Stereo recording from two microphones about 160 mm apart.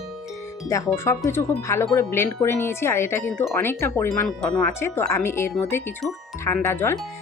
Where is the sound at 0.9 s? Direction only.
15° left (ahead or behind).